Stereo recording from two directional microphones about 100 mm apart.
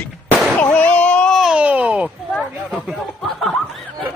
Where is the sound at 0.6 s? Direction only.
15° left (ahead or behind).